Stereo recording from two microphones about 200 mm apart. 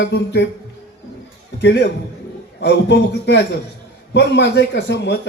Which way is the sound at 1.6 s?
55° left (ahead or behind).